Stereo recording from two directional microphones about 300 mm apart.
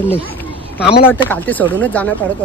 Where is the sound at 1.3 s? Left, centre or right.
Centre.